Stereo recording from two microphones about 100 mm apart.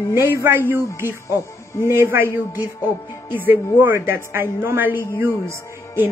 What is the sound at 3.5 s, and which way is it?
A woman's voice, 20° right (ahead or behind).